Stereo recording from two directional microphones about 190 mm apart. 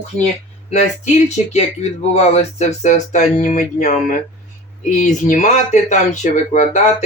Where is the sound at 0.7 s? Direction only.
35° left (ahead or behind).